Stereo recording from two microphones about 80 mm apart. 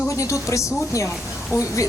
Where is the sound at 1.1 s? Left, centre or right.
Centre.